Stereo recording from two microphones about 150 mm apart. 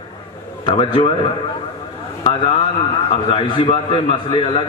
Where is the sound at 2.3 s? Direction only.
35° left (ahead or behind).